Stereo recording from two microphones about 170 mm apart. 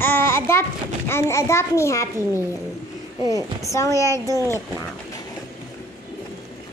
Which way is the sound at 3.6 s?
20° left (ahead or behind).